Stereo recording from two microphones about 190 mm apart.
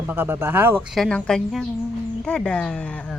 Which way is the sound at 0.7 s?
5° left (ahead or behind).